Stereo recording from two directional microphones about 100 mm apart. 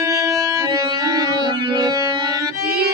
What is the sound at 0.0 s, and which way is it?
Music, 30° right (ahead or behind).